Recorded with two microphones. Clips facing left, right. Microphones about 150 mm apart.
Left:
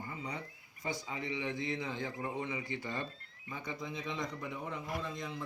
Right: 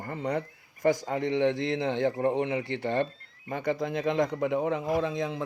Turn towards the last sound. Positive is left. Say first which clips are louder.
# right 11 dB
turn(degrees=-90)